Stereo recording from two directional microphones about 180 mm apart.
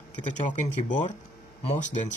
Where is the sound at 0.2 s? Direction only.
40° left (ahead or behind).